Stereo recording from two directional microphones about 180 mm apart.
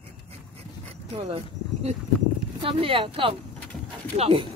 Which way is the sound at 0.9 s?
35° right (ahead or behind).